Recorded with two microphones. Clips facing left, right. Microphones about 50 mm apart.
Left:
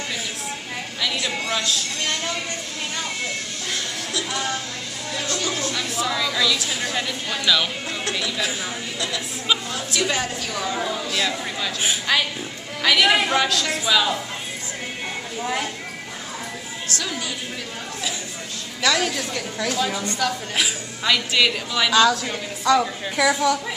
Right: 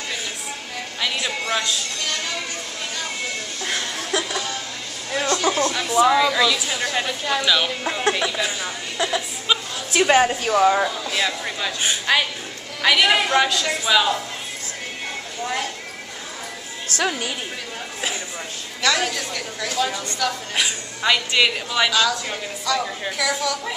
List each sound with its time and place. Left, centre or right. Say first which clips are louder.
1.0 s a sound: right 1 dB; centre
5.2 s a sound: right 7 dB; right
5.7 s a woman's voice: right 8 dB; centre
8.9 s a woman's voice: right 4 dB; right
11.2 s a woman's voice: right 1 dB; centre
15.4 s speech: even; centre
16.9 s music: right 6 dB; left
18.8 s a woman's voice: even; centre
21.9 s a woman's voice: left 8 dB; centre
22.7 s a woman's voice: left 5 dB; centre